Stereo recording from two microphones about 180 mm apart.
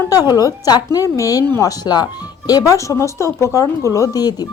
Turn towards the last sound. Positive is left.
turn(degrees=20)  # may be behind; listen again after turning